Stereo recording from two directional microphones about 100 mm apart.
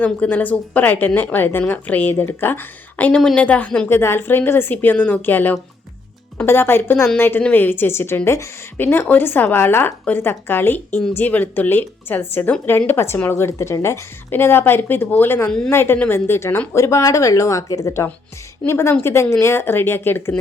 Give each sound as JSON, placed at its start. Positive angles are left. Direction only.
{"t": 0.0, "sound": "speech", "side_deg": 15}
{"t": 3.8, "sound": "a woman's voice", "side_deg": 25}
{"t": 15.4, "sound": "speech", "side_deg": 5}
{"t": 15.7, "sound": "a woman's voice", "side_deg": 20}